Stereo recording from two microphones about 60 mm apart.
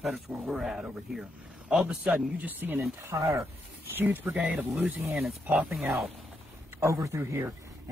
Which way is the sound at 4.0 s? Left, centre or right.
Right.